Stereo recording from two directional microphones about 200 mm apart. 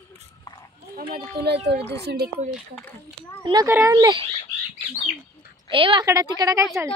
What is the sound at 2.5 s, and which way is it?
Speech, 5° left (ahead or behind).